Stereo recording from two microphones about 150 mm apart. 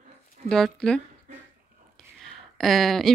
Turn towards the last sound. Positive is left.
turn(degrees=0)  # may be behind; listen again after turning